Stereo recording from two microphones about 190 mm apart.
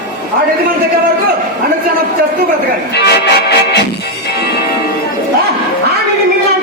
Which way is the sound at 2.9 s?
60° left (ahead or behind).